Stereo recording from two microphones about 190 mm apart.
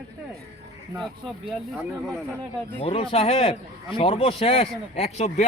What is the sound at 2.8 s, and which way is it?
Speech, 30° left (ahead or behind).